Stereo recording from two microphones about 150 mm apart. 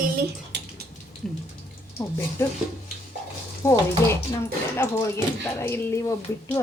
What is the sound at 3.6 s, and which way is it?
A woman's voice, 15° left (ahead or behind).